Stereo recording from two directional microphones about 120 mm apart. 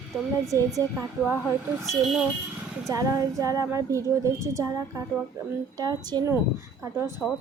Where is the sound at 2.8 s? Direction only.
25° right (ahead or behind).